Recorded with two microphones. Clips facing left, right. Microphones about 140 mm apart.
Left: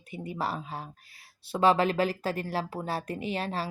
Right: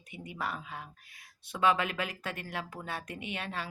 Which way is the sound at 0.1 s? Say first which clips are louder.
Left 5 dB; 30° left (ahead or behind).